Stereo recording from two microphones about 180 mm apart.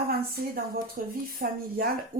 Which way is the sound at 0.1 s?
55° right (ahead or behind).